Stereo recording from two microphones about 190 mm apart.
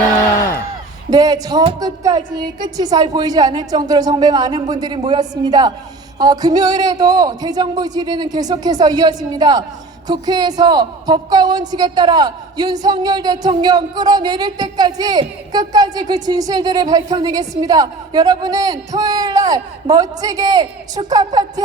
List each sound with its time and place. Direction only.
1.1 s a woman's voice: 20° right (ahead or behind)